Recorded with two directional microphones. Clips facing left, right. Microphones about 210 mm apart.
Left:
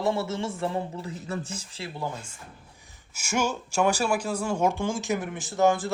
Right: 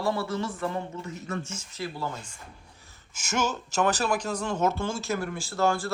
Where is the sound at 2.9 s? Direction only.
10° left (ahead or behind).